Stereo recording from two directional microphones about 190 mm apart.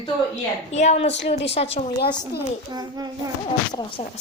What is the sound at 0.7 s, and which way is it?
Speech, 35° left (ahead or behind).